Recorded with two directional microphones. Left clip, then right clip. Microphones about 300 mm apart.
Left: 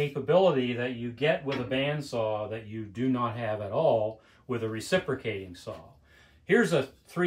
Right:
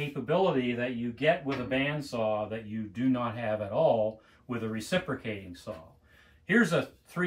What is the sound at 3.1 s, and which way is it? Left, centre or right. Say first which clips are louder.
Speech: left 1 dB; centre.